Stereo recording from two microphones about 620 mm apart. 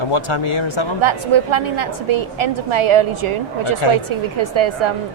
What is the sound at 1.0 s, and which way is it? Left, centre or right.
A woman's voice, right.